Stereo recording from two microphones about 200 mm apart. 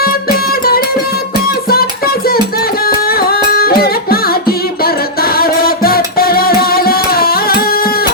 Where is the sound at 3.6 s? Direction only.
50° left (ahead or behind).